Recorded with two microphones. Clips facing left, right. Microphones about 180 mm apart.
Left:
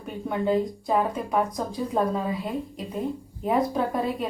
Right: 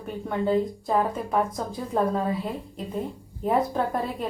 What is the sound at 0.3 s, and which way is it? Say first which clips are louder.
Speech: even; 5° left (ahead or behind).